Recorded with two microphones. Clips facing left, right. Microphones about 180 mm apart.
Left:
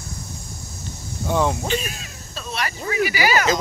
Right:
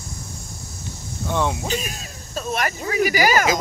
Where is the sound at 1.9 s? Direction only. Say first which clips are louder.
Right 5 dB; 45° right (ahead or behind).